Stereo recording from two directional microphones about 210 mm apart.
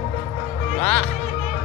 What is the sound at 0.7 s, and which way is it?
Music, 5° left (ahead or behind).